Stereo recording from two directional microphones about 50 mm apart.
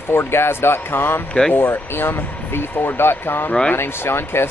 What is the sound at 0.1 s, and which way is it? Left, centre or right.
Speech, left.